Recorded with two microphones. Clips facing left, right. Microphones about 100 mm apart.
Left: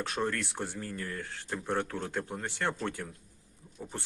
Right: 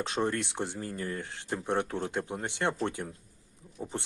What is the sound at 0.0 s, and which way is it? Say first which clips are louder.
Speech: right 2 dB; 20° right (ahead or behind).